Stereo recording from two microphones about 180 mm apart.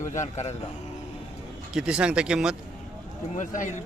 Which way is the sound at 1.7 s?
5° right (ahead or behind).